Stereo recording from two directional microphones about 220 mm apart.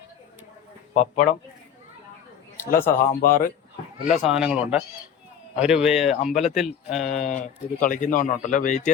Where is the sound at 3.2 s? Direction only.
40° left (ahead or behind).